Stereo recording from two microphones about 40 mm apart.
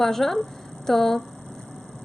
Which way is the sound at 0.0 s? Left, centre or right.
Centre.